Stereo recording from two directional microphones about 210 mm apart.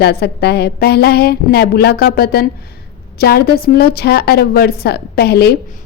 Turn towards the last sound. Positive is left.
turn(degrees=50)  # may be behind; listen again after turning